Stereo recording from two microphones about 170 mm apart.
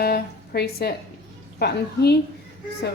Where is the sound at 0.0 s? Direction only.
65° left (ahead or behind).